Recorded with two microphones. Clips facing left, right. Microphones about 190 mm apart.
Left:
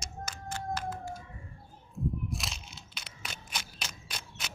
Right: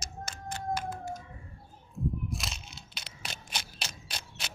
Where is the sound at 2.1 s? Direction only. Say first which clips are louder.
Even; centre (ahead or behind).